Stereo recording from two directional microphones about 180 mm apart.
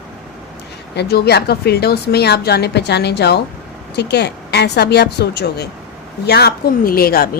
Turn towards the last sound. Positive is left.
turn(degrees=55)  # may be behind; listen again after turning